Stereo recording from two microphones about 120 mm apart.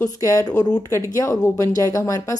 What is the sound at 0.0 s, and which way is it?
Speech, 30° left (ahead or behind).